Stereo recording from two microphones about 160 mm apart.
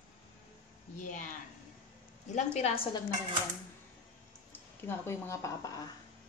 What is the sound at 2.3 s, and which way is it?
Speech, 45° left (ahead or behind).